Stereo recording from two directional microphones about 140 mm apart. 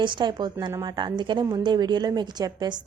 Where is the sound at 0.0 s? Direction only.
35° right (ahead or behind).